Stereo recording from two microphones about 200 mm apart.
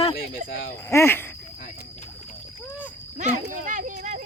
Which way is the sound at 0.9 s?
10° left (ahead or behind).